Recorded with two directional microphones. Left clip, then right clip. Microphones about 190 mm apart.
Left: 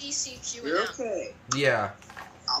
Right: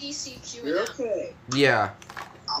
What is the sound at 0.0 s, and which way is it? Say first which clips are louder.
A woman's voice: left 2 dB; 50° left (ahead or behind).